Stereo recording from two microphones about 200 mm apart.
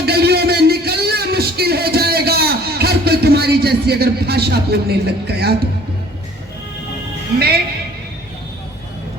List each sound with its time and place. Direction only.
0.0 s music: 55° right (ahead or behind)